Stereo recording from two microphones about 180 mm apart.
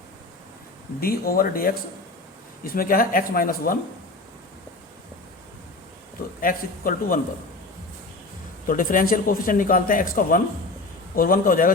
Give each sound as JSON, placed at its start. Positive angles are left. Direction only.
{"t": 0.9, "sound": "a man's voice", "side_deg": 55}
{"t": 6.4, "sound": "a man's voice", "side_deg": 50}
{"t": 8.6, "sound": "a man's voice", "side_deg": 50}